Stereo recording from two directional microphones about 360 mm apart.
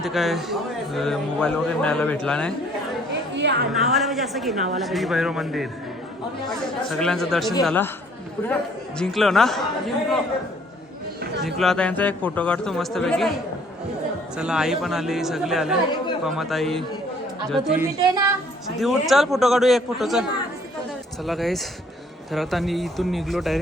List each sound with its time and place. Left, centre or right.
0.0 s a man's voice: centre
3.3 s a woman's voice: right
3.7 s a man's voice: centre
7.0 s a man's voice: centre
11.4 s a man's voice: centre
14.3 s a man's voice: centre